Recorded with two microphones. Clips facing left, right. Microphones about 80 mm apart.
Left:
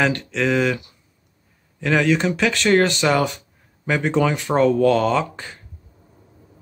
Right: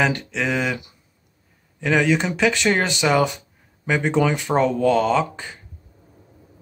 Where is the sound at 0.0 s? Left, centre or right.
Centre.